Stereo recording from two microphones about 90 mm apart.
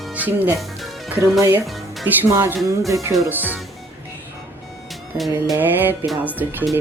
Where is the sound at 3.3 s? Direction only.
20° right (ahead or behind).